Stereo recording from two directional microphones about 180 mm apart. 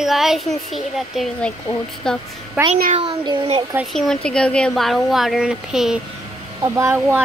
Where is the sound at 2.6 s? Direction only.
10° right (ahead or behind).